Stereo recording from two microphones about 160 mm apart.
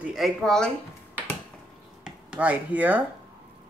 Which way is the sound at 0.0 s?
Centre (ahead or behind).